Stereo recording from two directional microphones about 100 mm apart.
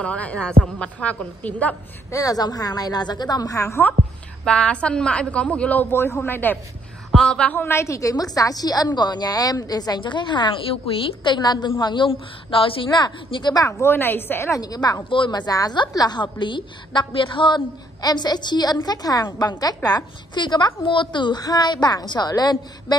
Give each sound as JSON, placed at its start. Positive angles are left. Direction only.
{"t": 0.0, "sound": "a woman's voice", "side_deg": 10}
{"t": 2.0, "sound": "a woman's voice", "side_deg": 35}
{"t": 4.5, "sound": "a woman's voice", "side_deg": 10}
{"t": 7.1, "sound": "speech", "side_deg": 5}
{"t": 7.5, "sound": "a woman's voice", "side_deg": 25}
{"t": 12.9, "sound": "a woman's voice", "side_deg": 45}
{"t": 13.7, "sound": "a woman's voice", "side_deg": 25}
{"t": 14.5, "sound": "a woman's voice", "side_deg": 40}
{"t": 15.0, "sound": "a woman's voice", "side_deg": 55}